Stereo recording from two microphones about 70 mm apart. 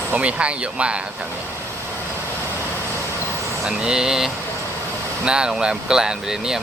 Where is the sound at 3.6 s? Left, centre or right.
Centre.